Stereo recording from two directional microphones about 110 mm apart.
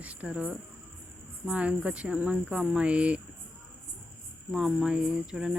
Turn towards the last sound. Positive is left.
turn(degrees=-5)  # may be behind; listen again after turning